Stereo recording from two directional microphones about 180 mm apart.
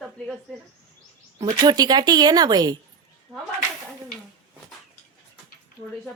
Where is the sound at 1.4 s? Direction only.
25° right (ahead or behind).